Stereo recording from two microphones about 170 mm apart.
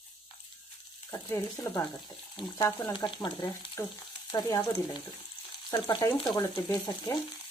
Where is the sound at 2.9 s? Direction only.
30° left (ahead or behind).